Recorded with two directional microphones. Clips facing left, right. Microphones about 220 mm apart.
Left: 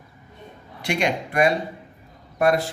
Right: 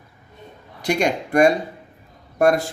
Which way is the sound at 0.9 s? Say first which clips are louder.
Right 3 dB; 45° right (ahead or behind).